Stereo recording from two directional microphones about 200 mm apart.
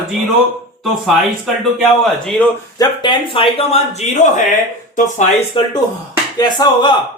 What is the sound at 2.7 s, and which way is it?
Speech, 20° left (ahead or behind).